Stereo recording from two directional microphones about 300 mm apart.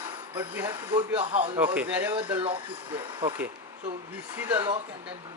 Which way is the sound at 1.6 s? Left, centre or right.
Centre.